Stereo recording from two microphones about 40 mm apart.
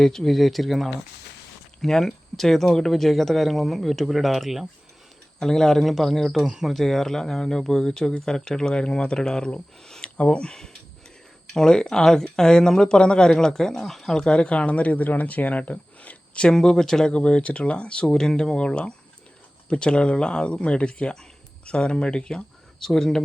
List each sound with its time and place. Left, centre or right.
0.0 s speech: centre
5.4 s speech: centre
6.4 s speech: centre
6.7 s speech: centre
10.0 s speech: left
11.5 s speech: centre; by 16.5 s left
16.5 s speech: centre
17.1 s speech: left
18.0 s speech: centre
22.8 s speech: centre